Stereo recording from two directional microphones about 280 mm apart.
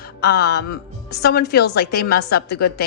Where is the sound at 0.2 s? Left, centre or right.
Left.